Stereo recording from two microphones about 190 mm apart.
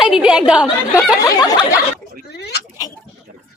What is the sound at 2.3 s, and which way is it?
Speech, 60° left (ahead or behind).